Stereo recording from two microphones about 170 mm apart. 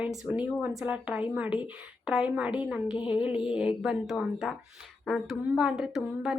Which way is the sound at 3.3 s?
30° left (ahead or behind).